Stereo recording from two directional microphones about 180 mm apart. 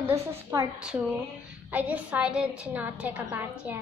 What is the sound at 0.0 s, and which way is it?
Speech, 15° right (ahead or behind).